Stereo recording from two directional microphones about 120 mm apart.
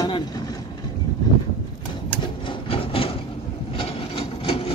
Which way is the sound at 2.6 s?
50° left (ahead or behind).